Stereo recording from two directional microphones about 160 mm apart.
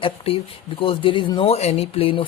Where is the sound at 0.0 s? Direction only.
35° left (ahead or behind).